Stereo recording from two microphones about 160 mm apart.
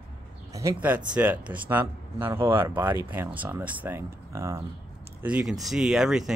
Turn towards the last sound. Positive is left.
turn(degrees=-5)  # may be behind; listen again after turning